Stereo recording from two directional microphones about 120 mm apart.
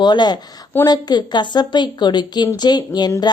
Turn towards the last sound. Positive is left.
turn(degrees=35)  # may be behind; listen again after turning